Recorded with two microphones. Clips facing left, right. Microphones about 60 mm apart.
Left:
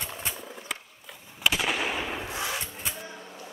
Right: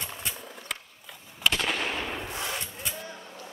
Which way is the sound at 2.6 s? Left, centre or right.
Left.